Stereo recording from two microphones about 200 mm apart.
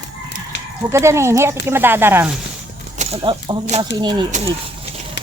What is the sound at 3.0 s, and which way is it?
Speech, 30° right (ahead or behind).